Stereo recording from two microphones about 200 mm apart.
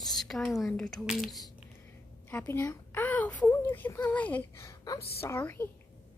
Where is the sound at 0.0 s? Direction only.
Centre (ahead or behind).